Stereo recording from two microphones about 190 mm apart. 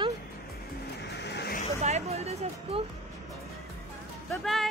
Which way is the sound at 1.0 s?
65° left (ahead or behind).